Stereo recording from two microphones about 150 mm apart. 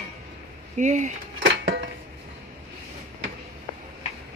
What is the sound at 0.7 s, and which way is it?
Speech, 55° right (ahead or behind).